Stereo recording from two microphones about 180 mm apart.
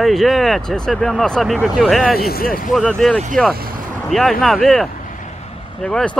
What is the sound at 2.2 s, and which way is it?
Speech, 55° left (ahead or behind).